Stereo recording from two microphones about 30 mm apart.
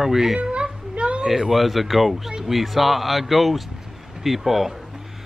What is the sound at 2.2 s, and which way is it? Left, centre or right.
Speech, centre.